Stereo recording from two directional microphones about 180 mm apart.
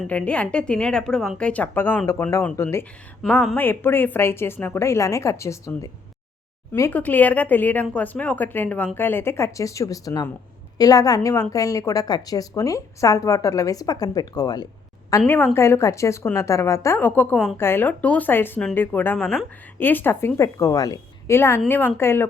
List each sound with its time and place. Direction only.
0.0 s a woman's voice: 5° left (ahead or behind)